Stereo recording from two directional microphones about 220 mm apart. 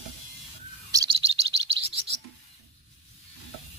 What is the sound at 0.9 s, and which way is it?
Chirp, 20° right (ahead or behind).